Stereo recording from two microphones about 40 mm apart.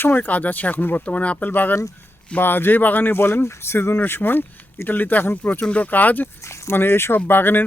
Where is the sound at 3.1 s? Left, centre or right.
Left.